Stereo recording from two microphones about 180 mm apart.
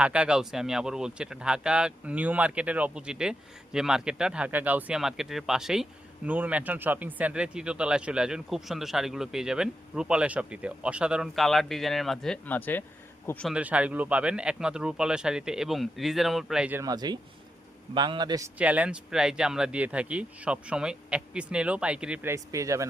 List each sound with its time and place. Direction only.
0.0 s speech: 5° right (ahead or behind)
13.5 s speech: 5° right (ahead or behind)
16.8 s a man's voice: 20° right (ahead or behind)
18.6 s speech: 5° right (ahead or behind)